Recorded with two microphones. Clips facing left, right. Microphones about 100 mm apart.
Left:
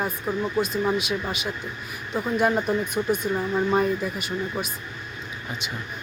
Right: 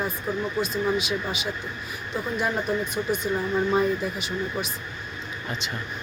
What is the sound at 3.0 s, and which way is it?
Speech, 20° left (ahead or behind).